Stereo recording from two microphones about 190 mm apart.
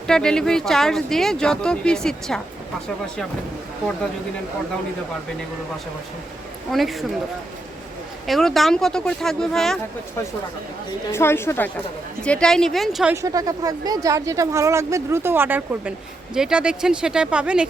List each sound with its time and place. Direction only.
0.1 s speech: 5° left (ahead or behind)
6.7 s speech: centre (ahead or behind)
8.3 s speech: centre (ahead or behind)
11.1 s a woman's voice: 15° left (ahead or behind)
13.2 s speech: 20° right (ahead or behind)